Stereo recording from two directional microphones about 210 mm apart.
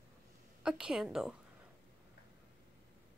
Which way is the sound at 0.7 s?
5° right (ahead or behind).